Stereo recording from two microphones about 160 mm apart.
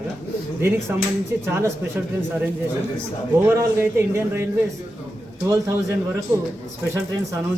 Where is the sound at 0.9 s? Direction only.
15° right (ahead or behind).